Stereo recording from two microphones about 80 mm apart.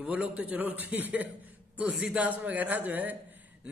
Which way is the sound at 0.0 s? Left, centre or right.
Centre.